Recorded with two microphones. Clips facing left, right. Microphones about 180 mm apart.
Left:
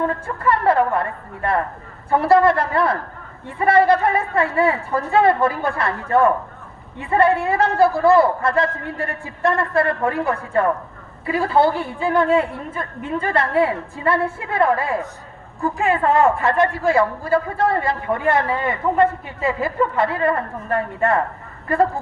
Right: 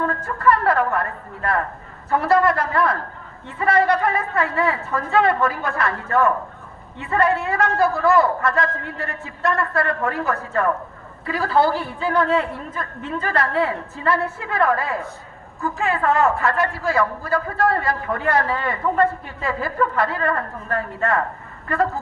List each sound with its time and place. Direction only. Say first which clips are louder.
0.0 s speech: right 1 dB; 25° left (ahead or behind)